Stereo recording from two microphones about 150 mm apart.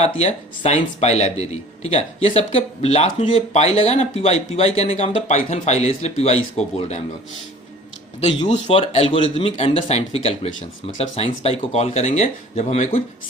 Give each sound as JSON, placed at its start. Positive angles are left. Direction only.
{"t": 0.2, "sound": "speech", "side_deg": 45}
{"t": 8.4, "sound": "speech", "side_deg": 50}